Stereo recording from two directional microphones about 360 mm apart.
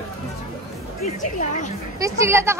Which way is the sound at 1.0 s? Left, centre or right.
Centre.